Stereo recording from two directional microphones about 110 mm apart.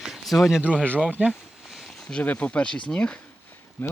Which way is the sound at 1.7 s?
Centre (ahead or behind).